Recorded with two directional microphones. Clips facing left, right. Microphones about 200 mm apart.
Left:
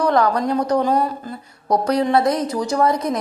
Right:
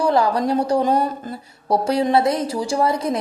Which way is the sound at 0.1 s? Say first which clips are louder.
Even; 30° right (ahead or behind).